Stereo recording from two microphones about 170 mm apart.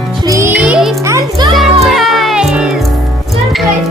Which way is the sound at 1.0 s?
20° right (ahead or behind).